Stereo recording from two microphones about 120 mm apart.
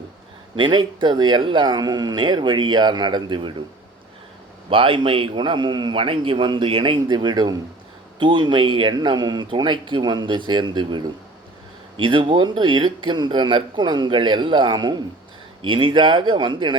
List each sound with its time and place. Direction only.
0.5 s speech: 40° right (ahead or behind)
4.7 s a man's voice: 45° right (ahead or behind)